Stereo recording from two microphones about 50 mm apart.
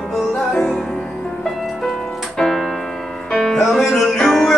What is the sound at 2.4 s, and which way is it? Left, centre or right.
Music, centre.